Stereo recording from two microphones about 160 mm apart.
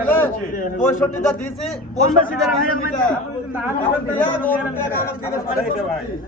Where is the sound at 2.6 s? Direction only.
60° left (ahead or behind).